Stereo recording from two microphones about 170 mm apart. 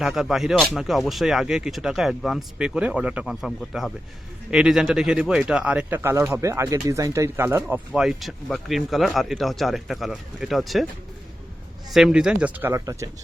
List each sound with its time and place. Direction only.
0.0 s speech: centre (ahead or behind)
7.9 s speech: centre (ahead or behind)
11.9 s speech: 5° right (ahead or behind); by 13.1 s 20° right (ahead or behind)